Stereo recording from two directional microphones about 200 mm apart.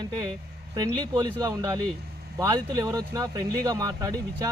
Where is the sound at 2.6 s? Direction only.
20° right (ahead or behind).